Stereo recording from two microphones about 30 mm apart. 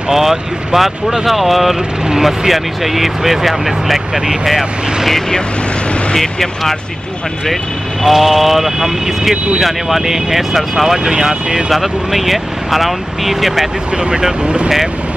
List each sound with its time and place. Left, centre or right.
0.1 s speech: centre
8.0 s speech: centre
11.7 s speech: centre
13.9 s speech: right
14.4 s speech: right